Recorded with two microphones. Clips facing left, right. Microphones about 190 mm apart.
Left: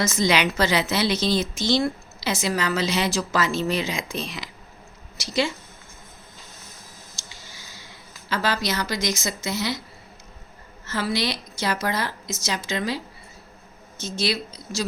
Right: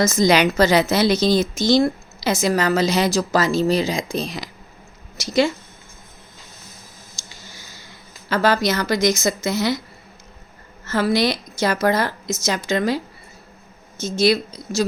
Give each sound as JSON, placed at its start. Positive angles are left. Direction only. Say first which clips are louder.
{"t": 0.0, "sound": "a woman's voice", "louder": "right 6 dB", "side_deg": -40}
{"t": 8.3, "sound": "a woman's voice", "louder": "right 7 dB", "side_deg": -50}
{"t": 10.8, "sound": "a woman's voice", "louder": "right 7 dB", "side_deg": -50}
{"t": 14.0, "sound": "a woman's voice", "louder": "right 9 dB", "side_deg": -45}